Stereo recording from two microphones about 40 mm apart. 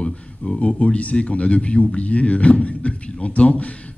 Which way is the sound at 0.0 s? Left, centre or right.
Left.